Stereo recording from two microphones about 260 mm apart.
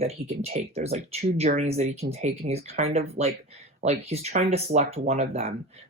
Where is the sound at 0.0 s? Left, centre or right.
Right.